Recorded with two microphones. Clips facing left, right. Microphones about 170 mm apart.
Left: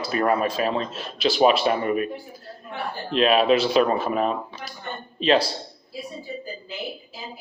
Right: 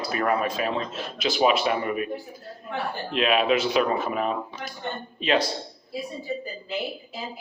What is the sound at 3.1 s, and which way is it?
Speech, 35° left (ahead or behind).